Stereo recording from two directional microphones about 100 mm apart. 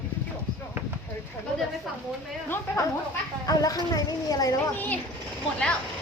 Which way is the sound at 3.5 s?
35° left (ahead or behind).